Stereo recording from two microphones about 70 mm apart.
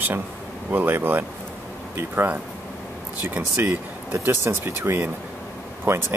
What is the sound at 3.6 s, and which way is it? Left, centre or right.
Speech, right.